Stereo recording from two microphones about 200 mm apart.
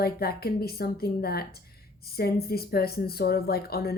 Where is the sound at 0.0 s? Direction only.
50° left (ahead or behind).